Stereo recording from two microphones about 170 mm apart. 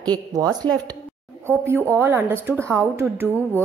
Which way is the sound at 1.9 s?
15° right (ahead or behind).